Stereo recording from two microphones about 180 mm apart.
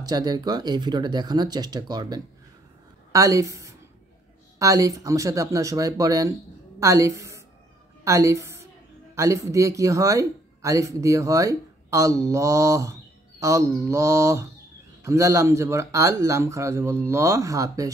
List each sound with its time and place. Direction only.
0.0 s a woman's voice: 20° right (ahead or behind)